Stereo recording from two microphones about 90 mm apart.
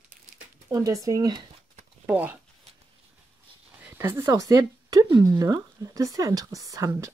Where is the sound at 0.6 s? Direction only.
40° right (ahead or behind).